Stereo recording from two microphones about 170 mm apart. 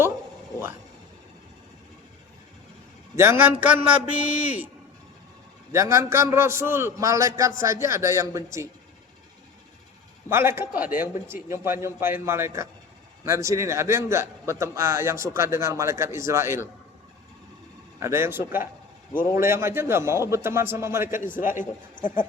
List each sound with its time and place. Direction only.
3.2 s a man's voice: 15° right (ahead or behind)
5.7 s a man's voice: 15° right (ahead or behind)
10.2 s a man's voice: 15° right (ahead or behind)
18.0 s a man's voice: 15° right (ahead or behind)
21.2 s a man's voice: 55° left (ahead or behind)